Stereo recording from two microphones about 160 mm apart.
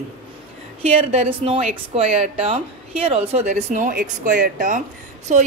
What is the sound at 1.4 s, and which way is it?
A woman's voice, 40° right (ahead or behind).